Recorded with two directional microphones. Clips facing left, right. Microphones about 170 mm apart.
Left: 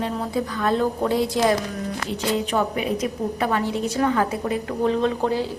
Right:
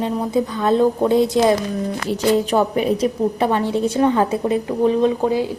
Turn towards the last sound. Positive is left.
turn(degrees=-15)  # may be behind; listen again after turning